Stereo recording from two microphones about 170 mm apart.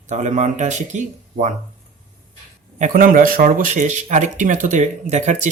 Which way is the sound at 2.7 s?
50° right (ahead or behind).